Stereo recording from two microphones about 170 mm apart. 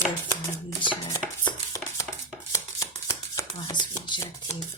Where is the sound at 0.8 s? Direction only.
25° left (ahead or behind).